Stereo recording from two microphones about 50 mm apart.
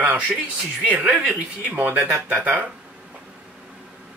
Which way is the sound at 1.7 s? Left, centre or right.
Right.